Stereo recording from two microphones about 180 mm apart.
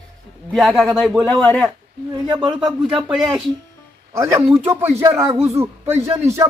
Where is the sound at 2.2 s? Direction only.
25° right (ahead or behind).